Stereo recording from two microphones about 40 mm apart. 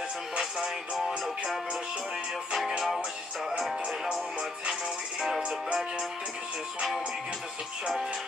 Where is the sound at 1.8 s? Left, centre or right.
Centre.